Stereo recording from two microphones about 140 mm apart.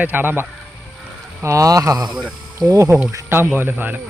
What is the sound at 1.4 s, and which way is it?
Speech, 25° right (ahead or behind).